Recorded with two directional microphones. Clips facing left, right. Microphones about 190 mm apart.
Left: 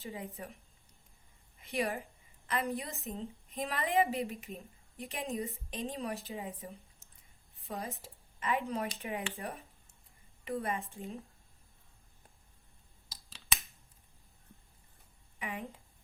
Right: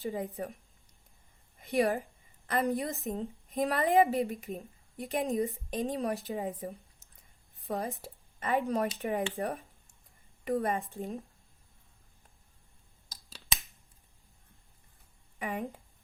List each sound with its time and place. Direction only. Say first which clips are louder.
0.0 s speech: right 8 dB; 40° right (ahead or behind)
1.5 s a woman's voice: right 7 dB; 40° right (ahead or behind)
15.4 s speech: right 6 dB; 45° right (ahead or behind)